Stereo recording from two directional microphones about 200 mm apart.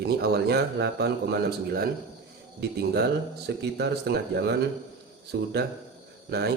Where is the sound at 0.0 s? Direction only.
55° right (ahead or behind).